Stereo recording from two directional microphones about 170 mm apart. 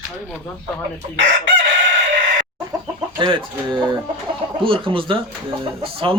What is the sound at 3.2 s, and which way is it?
Speech, 25° right (ahead or behind).